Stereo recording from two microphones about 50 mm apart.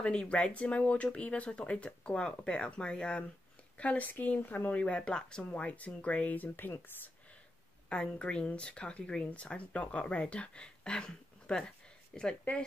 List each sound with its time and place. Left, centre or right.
0.0 s a woman's voice: left
5.5 s speech: left
7.9 s speech: left